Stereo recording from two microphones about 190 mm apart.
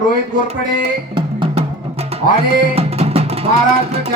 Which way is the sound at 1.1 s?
30° right (ahead or behind).